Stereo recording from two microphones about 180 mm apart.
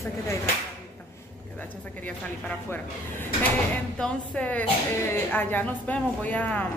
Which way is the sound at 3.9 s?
5° left (ahead or behind).